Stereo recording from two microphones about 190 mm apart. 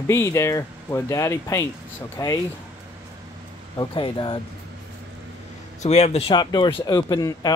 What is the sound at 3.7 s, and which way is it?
Speech, 25° left (ahead or behind).